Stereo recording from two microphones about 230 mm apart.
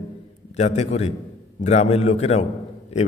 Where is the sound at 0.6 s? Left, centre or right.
Left.